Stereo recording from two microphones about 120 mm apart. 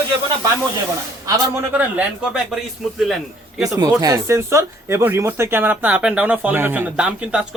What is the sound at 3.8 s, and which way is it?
Speech, 30° right (ahead or behind).